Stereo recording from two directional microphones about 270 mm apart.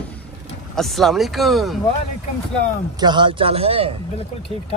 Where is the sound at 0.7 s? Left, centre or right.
Centre.